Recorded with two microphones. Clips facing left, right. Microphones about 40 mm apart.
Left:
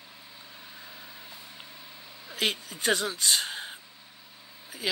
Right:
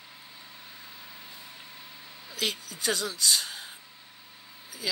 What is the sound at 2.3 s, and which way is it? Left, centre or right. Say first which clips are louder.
A woman's voice: left 3 dB; left.